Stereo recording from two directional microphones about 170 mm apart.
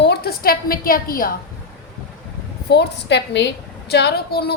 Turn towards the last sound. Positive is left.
turn(degrees=70)  # may be behind; listen again after turning